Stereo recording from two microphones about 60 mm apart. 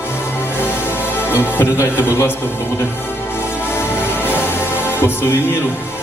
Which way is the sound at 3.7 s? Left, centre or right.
Left.